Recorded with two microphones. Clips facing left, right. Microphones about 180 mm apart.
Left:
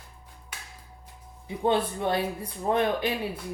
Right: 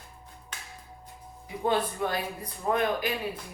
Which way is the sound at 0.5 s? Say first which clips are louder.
Even; 10° left (ahead or behind).